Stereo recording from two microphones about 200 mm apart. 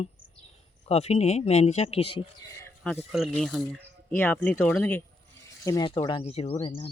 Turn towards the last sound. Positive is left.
turn(degrees=25)  # may be behind; listen again after turning